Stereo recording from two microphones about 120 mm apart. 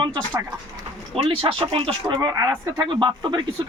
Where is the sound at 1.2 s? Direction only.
45° right (ahead or behind).